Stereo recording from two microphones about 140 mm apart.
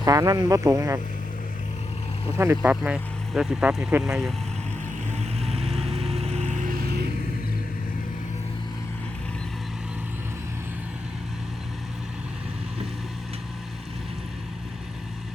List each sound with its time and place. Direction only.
0.0 s speech: 25° right (ahead or behind)
2.6 s speech: 10° right (ahead or behind)
5.1 s music: 50° right (ahead or behind)